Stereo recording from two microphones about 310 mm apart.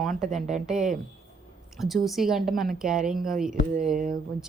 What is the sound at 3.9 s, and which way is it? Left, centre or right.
Speech, right.